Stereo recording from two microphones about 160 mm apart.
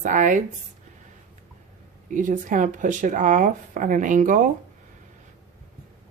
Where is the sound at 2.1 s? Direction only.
55° right (ahead or behind).